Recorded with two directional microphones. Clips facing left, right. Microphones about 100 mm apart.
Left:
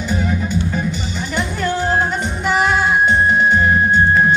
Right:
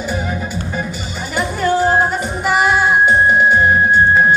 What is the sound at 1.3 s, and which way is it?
Music, 5° right (ahead or behind).